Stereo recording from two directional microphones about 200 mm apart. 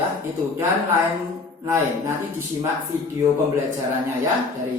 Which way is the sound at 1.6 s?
15° right (ahead or behind).